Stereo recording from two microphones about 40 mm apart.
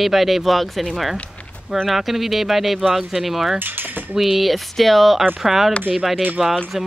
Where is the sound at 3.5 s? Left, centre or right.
Right.